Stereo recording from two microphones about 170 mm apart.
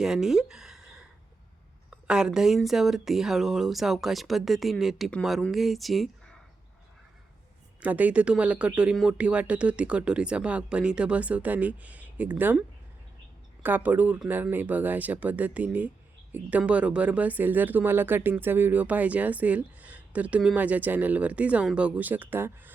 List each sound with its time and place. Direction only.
0.0 s a sound: centre (ahead or behind)
1.9 s speech: 5° right (ahead or behind)
7.8 s speech: 10° right (ahead or behind)